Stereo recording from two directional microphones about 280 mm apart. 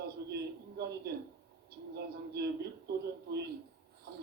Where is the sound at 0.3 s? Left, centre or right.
Right.